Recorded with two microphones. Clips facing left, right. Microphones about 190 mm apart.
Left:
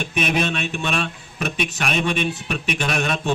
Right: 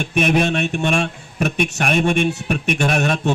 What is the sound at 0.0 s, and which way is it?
A man's voice, 50° right (ahead or behind).